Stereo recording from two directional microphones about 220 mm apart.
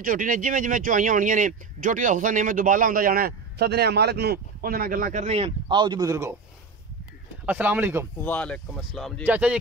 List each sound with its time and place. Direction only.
0.0 s speech: 40° right (ahead or behind); by 6.3 s 15° right (ahead or behind)
7.4 s speech: 5° right (ahead or behind)
8.2 s speech: 5° left (ahead or behind)